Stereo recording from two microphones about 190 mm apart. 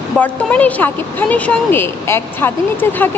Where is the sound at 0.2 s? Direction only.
10° left (ahead or behind).